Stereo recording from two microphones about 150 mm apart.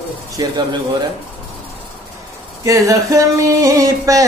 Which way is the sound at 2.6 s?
20° right (ahead or behind).